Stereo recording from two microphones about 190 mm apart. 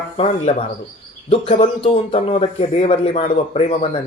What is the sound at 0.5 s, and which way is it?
Speech, 35° left (ahead or behind).